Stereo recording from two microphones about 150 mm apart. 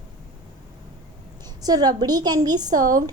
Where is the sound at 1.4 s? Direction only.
25° right (ahead or behind).